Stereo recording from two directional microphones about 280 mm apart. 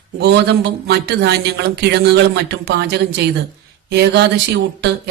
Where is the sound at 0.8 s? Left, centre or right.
Right.